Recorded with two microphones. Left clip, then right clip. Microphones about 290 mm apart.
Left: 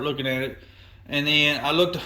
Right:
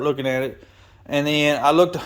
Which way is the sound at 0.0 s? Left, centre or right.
Centre.